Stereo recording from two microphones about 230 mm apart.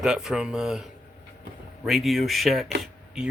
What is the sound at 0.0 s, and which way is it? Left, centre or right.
Speech, centre.